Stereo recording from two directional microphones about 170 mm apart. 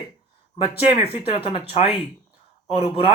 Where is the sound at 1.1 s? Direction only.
30° left (ahead or behind).